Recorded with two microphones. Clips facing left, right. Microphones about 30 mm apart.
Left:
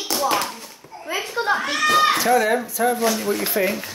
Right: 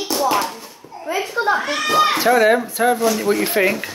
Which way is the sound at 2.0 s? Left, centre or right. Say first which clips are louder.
Right 3 dB; right.